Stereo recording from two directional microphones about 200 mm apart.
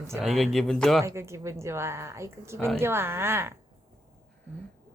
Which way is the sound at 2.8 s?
10° right (ahead or behind).